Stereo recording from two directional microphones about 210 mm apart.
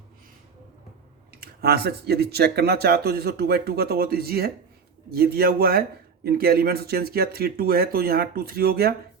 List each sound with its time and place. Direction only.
1.4 s speech: 50° right (ahead or behind)